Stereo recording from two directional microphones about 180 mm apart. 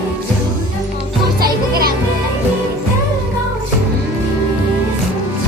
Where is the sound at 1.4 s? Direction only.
55° right (ahead or behind).